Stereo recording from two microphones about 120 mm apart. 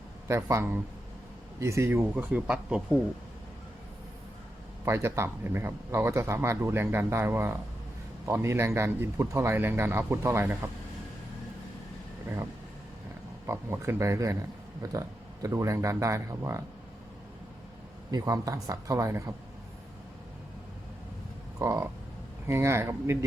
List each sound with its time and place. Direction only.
0.3 s speech: 25° right (ahead or behind); by 3.0 s 10° right (ahead or behind)
4.9 s speech: 20° right (ahead or behind)
13.5 s speech: 20° right (ahead or behind)
18.1 s speech: 30° right (ahead or behind)
21.6 s speech: 25° right (ahead or behind)